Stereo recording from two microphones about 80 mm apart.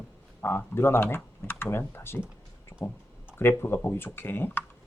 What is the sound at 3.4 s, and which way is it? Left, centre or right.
Speech, left.